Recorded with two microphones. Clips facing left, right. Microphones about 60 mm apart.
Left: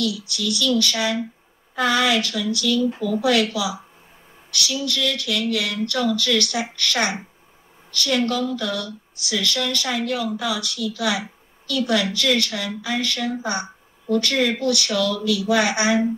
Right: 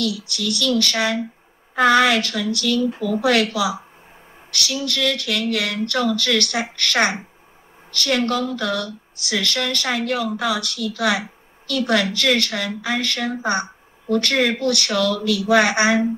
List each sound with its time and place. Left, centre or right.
0.0 s a woman's voice: right